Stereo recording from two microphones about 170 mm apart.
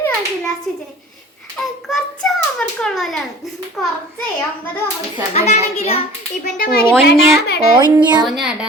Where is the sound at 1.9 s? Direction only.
5° left (ahead or behind).